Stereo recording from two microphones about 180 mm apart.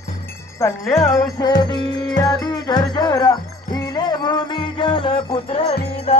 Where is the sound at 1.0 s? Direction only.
20° left (ahead or behind).